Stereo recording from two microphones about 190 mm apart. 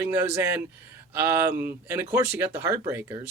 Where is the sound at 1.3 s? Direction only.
10° right (ahead or behind).